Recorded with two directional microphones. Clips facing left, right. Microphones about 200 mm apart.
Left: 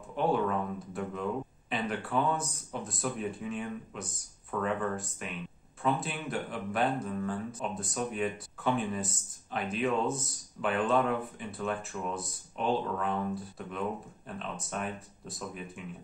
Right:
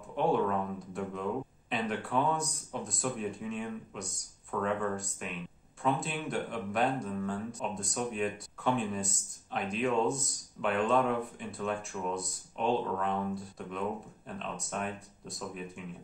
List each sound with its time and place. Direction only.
0.1 s speech: centre (ahead or behind)